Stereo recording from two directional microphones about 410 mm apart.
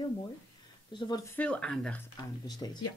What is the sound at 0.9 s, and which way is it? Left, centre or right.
Speech, centre.